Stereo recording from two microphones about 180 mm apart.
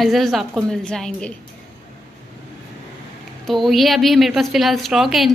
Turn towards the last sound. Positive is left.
turn(degrees=0)  # may be behind; listen again after turning